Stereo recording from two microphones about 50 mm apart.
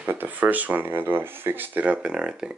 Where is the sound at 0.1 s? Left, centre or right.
Right.